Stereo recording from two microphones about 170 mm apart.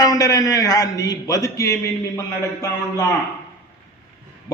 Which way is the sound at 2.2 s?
15° left (ahead or behind).